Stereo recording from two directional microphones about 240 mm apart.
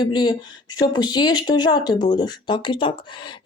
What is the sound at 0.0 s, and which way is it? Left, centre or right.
Speech, centre.